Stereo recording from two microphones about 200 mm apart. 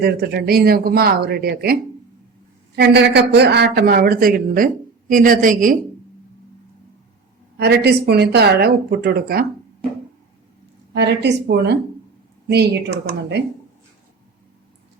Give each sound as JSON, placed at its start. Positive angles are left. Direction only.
{"t": 0.0, "sound": "speech", "side_deg": -50}
{"t": 7.5, "sound": "speech", "side_deg": -55}
{"t": 10.9, "sound": "speech", "side_deg": -60}